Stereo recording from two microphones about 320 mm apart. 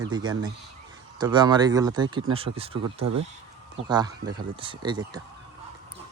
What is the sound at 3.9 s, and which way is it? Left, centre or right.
Speech, centre.